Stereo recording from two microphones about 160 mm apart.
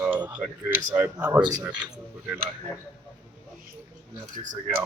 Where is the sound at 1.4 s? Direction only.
25° right (ahead or behind).